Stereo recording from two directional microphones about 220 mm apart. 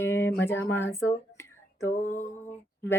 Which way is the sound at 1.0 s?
10° left (ahead or behind).